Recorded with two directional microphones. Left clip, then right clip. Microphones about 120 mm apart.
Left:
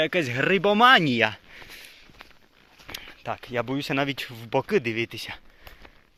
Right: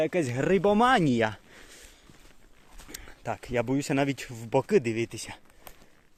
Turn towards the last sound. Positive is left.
turn(degrees=-25)  # may be behind; listen again after turning